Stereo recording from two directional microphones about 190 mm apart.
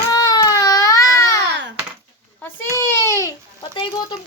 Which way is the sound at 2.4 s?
15° left (ahead or behind).